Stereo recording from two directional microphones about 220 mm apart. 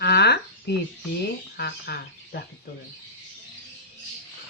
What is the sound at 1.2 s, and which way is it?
Speech, 45° left (ahead or behind).